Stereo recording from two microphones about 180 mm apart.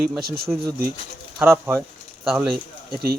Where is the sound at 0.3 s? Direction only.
55° right (ahead or behind).